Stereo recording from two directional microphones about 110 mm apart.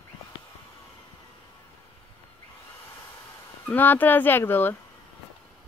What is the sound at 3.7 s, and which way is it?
Speech, 15° left (ahead or behind).